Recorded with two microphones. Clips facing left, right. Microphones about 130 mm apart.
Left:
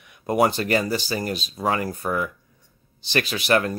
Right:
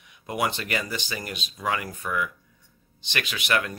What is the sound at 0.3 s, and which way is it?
Speech, 40° left (ahead or behind).